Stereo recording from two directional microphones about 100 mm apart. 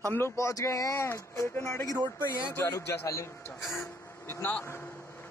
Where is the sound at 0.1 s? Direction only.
25° left (ahead or behind).